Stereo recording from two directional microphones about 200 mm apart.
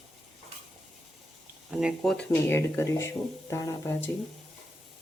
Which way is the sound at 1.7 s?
Centre (ahead or behind).